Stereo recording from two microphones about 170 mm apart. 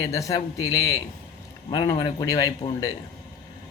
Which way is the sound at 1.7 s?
20° left (ahead or behind).